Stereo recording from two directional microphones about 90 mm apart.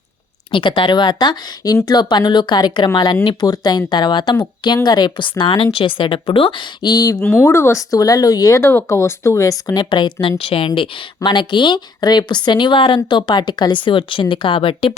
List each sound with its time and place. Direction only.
0.5 s speech: 65° left (ahead or behind); by 7.2 s 45° left (ahead or behind)
7.2 s speech: 25° left (ahead or behind)
9.9 s speech: 65° left (ahead or behind)
10.8 s speech: 60° left (ahead or behind); by 14.9 s 80° left